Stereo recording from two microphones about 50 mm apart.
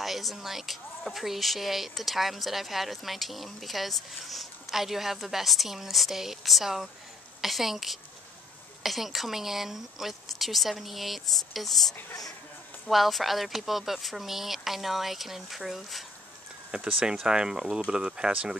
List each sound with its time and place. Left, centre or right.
0.0 s speech: centre
16.7 s speech: centre